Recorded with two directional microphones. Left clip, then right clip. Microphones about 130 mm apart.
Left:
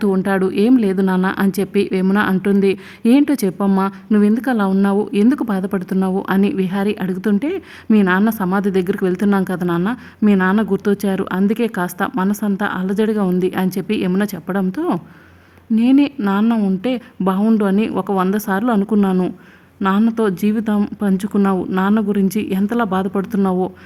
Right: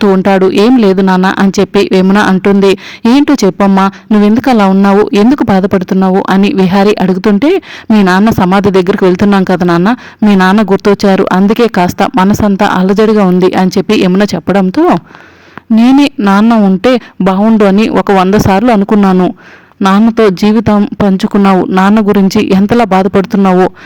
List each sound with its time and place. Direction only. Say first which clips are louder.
0.0 s speech: right 11 dB; 45° right (ahead or behind)
15.8 s speech: right 8 dB; 50° right (ahead or behind)
21.4 s speech: right 12 dB; 35° right (ahead or behind)